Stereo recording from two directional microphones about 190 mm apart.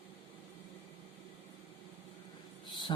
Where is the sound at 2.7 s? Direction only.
25° left (ahead or behind).